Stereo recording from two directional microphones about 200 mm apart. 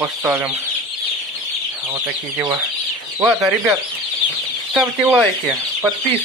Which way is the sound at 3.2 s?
5° right (ahead or behind).